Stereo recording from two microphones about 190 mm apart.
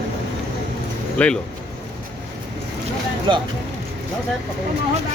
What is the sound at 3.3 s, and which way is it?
Speech, 25° right (ahead or behind).